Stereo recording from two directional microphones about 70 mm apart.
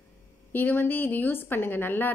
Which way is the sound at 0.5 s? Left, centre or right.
Left.